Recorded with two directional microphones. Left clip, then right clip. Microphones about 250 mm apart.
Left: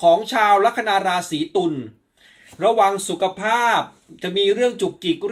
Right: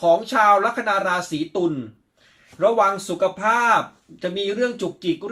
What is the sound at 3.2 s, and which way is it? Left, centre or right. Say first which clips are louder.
Speech: even; centre.